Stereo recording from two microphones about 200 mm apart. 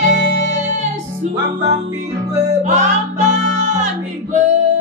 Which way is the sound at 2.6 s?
35° right (ahead or behind).